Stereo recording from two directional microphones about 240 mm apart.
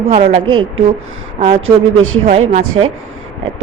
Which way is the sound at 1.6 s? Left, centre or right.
Right.